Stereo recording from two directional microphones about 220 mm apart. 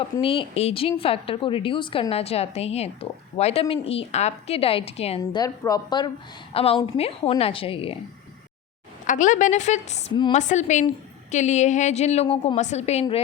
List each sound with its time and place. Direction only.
0.0 s a woman's voice: 25° left (ahead or behind)
5.4 s a woman's voice: 15° left (ahead or behind)
9.0 s a woman's voice: 35° left (ahead or behind)